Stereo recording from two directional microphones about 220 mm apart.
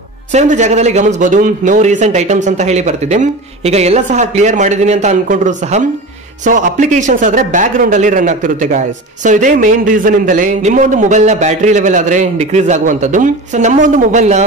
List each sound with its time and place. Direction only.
0.3 s speech: 30° right (ahead or behind)